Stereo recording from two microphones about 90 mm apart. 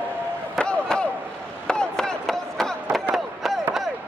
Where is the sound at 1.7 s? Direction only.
10° left (ahead or behind).